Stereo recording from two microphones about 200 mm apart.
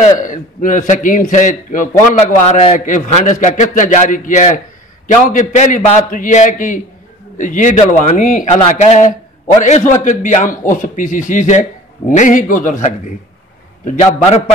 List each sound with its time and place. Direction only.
0.0 s a man's voice: 40° left (ahead or behind)